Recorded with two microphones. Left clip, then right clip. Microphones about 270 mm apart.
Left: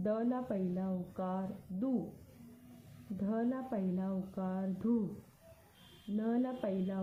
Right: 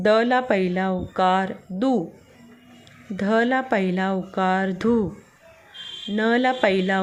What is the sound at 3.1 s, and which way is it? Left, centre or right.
Speech, right.